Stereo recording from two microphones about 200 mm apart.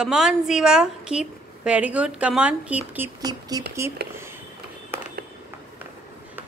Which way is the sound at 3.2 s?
20° right (ahead or behind).